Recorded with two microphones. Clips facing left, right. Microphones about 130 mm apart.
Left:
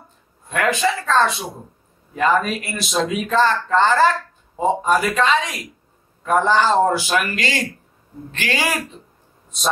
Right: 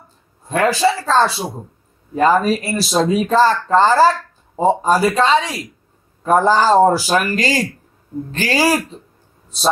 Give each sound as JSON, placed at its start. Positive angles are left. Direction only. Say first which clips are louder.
{"t": 0.5, "sound": "speech", "louder": "right 4 dB", "side_deg": -35}